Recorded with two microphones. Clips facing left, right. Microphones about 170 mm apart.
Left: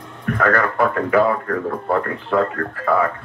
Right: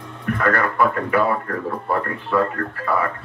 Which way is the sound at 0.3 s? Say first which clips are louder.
Left 2 dB; 50° left (ahead or behind).